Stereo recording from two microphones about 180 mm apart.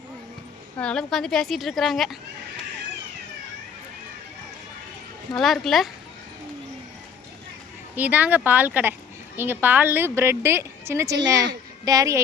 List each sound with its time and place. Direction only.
0.8 s a woman's voice: 5° left (ahead or behind)
5.3 s a woman's voice: centre (ahead or behind)
7.9 s a woman's voice: 10° right (ahead or behind)